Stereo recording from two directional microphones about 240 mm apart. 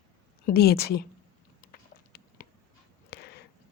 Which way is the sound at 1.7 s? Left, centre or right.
Left.